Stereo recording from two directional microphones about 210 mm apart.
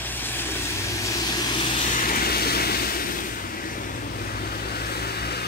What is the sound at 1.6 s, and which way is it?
Vehicle, 35° left (ahead or behind).